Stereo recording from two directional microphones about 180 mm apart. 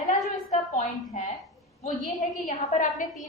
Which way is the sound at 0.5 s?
45° left (ahead or behind).